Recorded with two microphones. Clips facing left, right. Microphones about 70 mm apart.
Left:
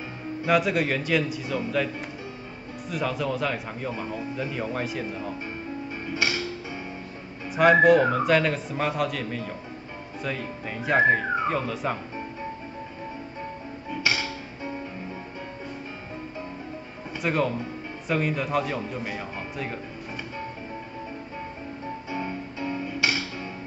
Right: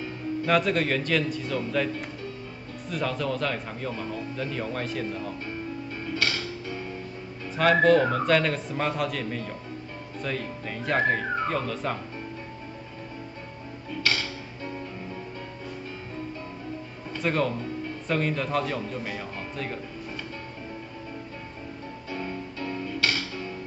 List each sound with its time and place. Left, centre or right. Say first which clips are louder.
0.4 s speech: left 1 dB; centre
6.0 s music: left 1 dB; centre
7.5 s speech: left 3 dB; centre
13.8 s music: left 1 dB; centre
17.1 s speech: left 1 dB; centre
22.1 s music: even; centre